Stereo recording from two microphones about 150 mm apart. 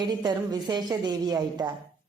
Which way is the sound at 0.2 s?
30° right (ahead or behind).